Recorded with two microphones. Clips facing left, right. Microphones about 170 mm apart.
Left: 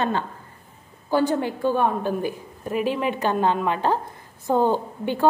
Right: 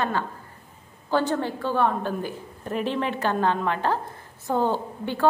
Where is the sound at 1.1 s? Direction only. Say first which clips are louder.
Left 3 dB; 10° left (ahead or behind).